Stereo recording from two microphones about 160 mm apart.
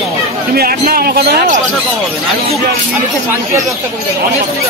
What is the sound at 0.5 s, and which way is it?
Speech, 70° right (ahead or behind).